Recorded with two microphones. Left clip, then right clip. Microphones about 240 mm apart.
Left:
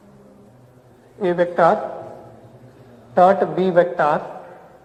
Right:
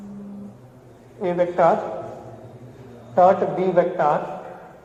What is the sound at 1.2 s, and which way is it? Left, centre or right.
Speech, left.